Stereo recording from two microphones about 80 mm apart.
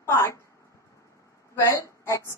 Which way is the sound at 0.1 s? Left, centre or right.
Left.